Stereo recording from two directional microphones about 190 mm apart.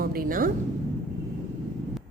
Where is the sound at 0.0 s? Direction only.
50° right (ahead or behind).